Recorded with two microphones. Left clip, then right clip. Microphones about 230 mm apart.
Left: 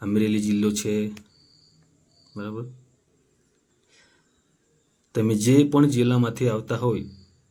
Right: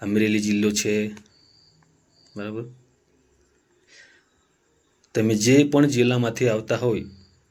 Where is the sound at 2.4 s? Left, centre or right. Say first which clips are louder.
Right 2 dB; left.